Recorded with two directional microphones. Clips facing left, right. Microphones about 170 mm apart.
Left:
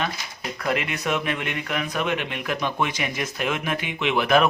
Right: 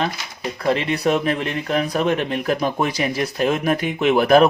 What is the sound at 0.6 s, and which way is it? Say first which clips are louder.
A man's voice: right 7 dB; 30° right (ahead or behind).